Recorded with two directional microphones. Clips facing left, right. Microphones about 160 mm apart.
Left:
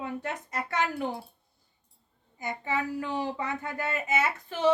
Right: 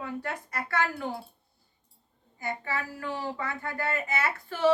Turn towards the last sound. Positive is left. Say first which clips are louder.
# left 1 dB
turn(degrees=20)  # may be behind; listen again after turning